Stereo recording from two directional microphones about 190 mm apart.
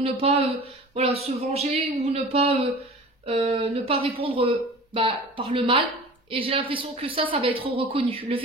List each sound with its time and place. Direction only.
0.0 s speech: 30° right (ahead or behind)